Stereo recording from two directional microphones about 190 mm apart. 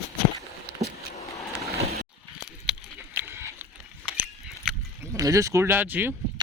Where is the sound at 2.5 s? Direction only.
5° right (ahead or behind).